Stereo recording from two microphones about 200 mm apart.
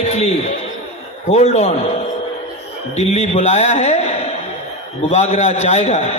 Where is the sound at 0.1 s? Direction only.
30° left (ahead or behind).